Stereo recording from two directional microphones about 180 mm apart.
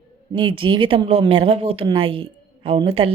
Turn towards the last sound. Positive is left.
turn(degrees=-30)  # may be behind; listen again after turning